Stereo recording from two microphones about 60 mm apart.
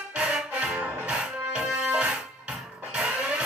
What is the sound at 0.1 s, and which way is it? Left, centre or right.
Music, centre.